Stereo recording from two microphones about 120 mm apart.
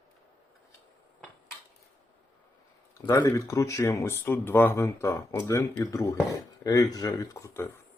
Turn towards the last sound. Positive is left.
turn(degrees=25)  # may be behind; listen again after turning